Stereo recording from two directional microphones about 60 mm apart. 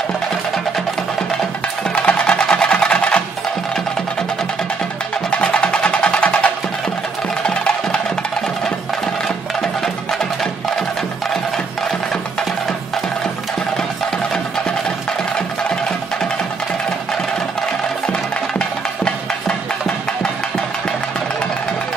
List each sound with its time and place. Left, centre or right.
2.0 s music: centre
5.3 s music: centre
18.6 s music: centre